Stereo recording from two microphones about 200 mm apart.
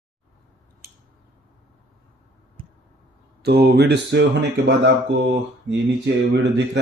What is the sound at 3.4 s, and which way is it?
Speech, 55° right (ahead or behind).